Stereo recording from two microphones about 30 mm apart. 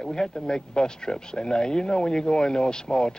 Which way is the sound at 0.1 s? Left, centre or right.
Left.